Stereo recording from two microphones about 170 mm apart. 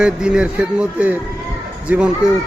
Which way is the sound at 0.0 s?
5° right (ahead or behind).